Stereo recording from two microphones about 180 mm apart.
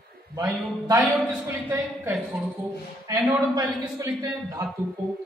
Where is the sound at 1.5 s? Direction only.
10° right (ahead or behind).